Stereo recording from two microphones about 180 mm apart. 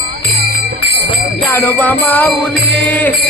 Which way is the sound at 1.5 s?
10° left (ahead or behind).